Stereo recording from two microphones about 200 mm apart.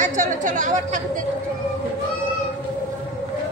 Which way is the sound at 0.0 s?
40° right (ahead or behind).